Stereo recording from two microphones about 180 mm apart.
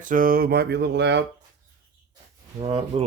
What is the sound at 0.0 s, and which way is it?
Mantra, 50° right (ahead or behind).